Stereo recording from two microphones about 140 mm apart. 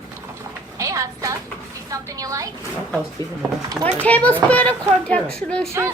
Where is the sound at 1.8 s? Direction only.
25° right (ahead or behind).